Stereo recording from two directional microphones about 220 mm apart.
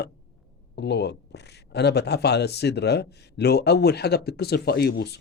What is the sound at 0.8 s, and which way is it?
Speech, 50° left (ahead or behind).